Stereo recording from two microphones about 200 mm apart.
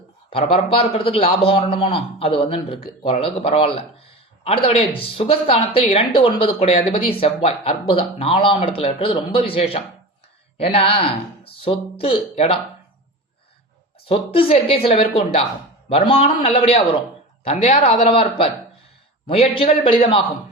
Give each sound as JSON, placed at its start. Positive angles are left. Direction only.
{"t": 0.3, "sound": "a man's voice", "side_deg": 25}
{"t": 14.1, "sound": "a man's voice", "side_deg": 25}